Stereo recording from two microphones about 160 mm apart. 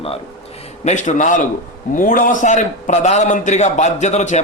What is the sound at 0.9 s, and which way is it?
A man's voice, 50° left (ahead or behind).